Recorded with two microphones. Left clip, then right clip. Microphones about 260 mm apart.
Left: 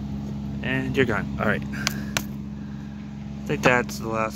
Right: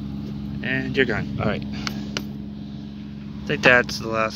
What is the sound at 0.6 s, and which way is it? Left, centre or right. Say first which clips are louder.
Speech: right 2 dB; centre.